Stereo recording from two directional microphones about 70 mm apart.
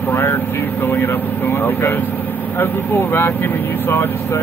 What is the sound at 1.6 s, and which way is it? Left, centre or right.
Speech, left.